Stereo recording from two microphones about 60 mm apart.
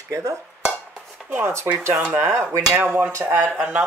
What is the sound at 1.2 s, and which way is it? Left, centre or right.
Speech, right.